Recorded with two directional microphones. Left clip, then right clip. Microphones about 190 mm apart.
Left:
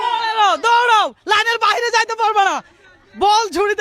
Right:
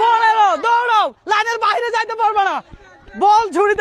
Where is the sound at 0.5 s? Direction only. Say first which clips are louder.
Left 1 dB; 25° left (ahead or behind).